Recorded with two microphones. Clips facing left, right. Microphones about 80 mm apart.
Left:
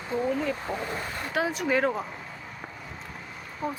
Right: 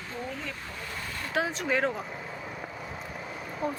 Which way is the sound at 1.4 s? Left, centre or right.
Centre.